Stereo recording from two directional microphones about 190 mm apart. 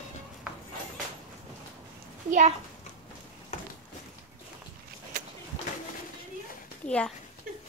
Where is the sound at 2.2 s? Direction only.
40° right (ahead or behind).